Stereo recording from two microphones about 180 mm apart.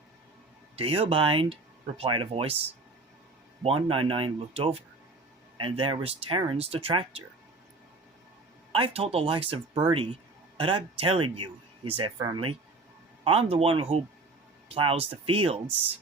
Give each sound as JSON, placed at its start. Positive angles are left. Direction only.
{"t": 0.8, "sound": "speech", "side_deg": -30}
{"t": 3.6, "sound": "speech", "side_deg": -30}
{"t": 8.7, "sound": "speech", "side_deg": -30}